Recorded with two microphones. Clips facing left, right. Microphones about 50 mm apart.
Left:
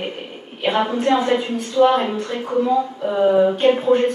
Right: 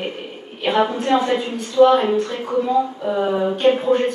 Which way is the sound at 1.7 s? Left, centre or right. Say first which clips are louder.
Right 2 dB; centre.